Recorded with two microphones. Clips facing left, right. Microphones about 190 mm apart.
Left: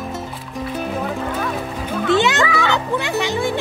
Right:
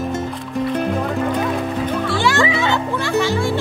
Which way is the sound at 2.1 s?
20° left (ahead or behind).